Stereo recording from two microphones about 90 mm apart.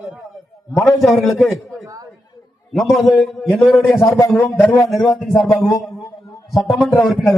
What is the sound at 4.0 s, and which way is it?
Speech, 35° left (ahead or behind).